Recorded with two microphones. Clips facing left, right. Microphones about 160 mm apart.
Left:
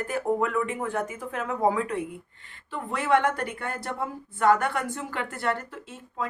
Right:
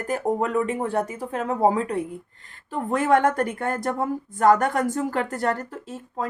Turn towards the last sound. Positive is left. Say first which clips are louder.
# right 4 dB
turn(degrees=-40)  # may be behind; listen again after turning